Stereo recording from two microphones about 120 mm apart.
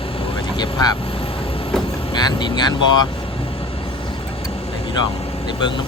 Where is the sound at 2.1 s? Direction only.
35° left (ahead or behind).